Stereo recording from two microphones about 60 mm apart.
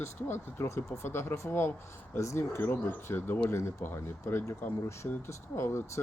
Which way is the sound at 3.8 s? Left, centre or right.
Left.